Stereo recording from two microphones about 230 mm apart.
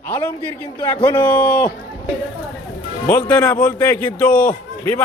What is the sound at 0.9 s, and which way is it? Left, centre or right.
Speech, centre.